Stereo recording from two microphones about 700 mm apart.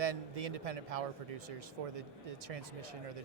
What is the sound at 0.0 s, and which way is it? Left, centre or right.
A man's voice, right.